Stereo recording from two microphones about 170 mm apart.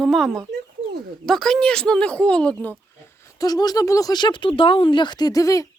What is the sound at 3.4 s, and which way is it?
Speech, 20° left (ahead or behind).